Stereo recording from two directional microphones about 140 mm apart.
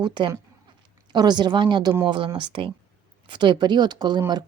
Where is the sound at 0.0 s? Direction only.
35° right (ahead or behind).